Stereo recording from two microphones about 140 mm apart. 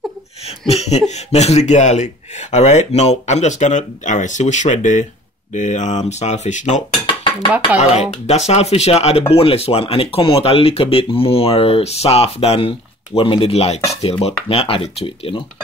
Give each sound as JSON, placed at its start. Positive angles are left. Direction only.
{"t": 0.5, "sound": "speech", "side_deg": 50}
{"t": 7.9, "sound": "speech", "side_deg": 50}